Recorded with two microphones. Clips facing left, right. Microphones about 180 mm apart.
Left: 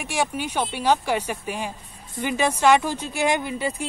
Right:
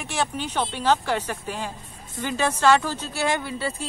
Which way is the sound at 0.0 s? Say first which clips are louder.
Left 2 dB; 10° left (ahead or behind).